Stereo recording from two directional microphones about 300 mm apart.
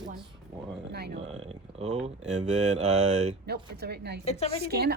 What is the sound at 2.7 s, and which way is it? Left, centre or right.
A woman's voice, right.